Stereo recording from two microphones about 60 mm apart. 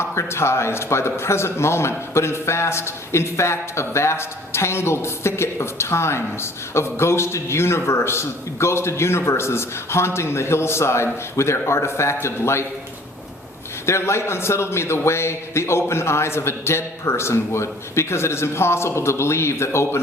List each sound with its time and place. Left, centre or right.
0.0 s a man's voice: left
13.8 s a man's voice: left